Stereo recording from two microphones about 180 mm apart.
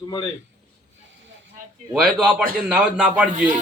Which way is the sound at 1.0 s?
90° right.